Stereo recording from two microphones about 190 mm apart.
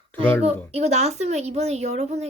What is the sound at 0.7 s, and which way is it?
A woman's voice, 35° right (ahead or behind).